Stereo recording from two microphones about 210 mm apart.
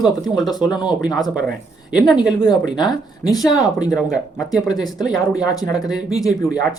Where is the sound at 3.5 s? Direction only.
15° left (ahead or behind).